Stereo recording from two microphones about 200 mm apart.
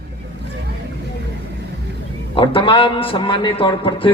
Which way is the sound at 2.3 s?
25° left (ahead or behind).